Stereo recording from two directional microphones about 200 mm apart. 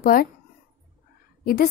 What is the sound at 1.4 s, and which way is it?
Speech, 45° left (ahead or behind).